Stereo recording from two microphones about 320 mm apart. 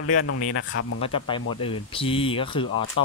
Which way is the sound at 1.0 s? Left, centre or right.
Centre.